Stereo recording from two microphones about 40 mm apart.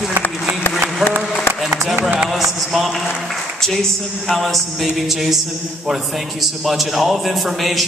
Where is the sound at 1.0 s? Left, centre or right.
Centre.